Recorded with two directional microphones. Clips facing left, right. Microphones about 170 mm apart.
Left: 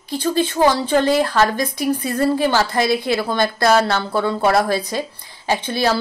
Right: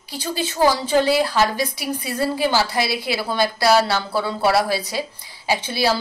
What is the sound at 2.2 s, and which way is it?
Speech, 10° right (ahead or behind).